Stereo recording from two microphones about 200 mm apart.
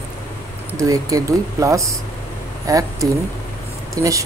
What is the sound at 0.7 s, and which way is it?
Speech, 15° right (ahead or behind).